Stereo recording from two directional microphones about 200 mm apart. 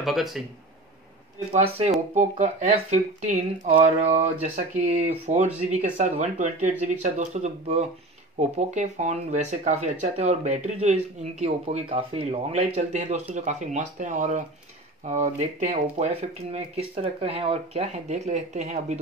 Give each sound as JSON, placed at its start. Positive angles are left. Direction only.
{"t": 0.0, "sound": "speech", "side_deg": 0}
{"t": 2.1, "sound": "speech", "side_deg": -35}